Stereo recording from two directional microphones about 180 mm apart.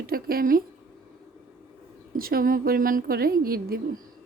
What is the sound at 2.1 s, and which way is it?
Speech, 55° right (ahead or behind).